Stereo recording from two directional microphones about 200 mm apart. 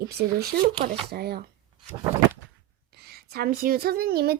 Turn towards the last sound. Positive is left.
turn(degrees=-50)  # may be behind; listen again after turning